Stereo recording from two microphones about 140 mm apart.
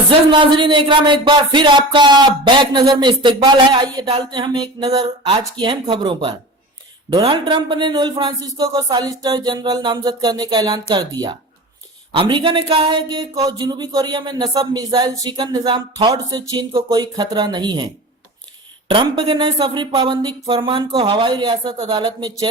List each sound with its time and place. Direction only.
0.1 s speech: 35° right (ahead or behind)
18.9 s speech: 35° right (ahead or behind)